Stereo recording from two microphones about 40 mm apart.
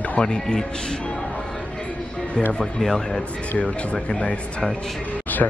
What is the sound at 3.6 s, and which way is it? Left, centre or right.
A man's voice, left.